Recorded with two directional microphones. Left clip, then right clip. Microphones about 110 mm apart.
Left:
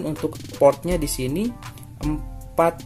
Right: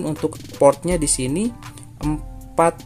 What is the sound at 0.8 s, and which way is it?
Speech, 35° right (ahead or behind).